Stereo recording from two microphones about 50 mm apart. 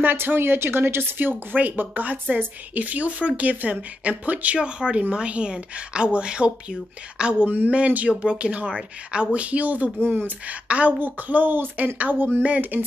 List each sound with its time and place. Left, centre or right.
0.0 s a woman's voice: right
1.5 s a woman's voice: right
4.6 s a woman's voice: centre
7.4 s a woman's voice: right
10.0 s a woman's voice: right
10.4 s a woman's voice: right